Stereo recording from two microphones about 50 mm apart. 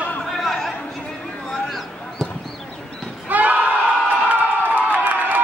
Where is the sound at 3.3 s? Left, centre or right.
Right.